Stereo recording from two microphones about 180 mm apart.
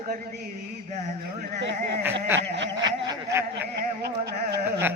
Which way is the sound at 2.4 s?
80° right.